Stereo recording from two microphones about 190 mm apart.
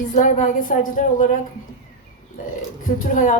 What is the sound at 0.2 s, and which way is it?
Speech, 45° left (ahead or behind).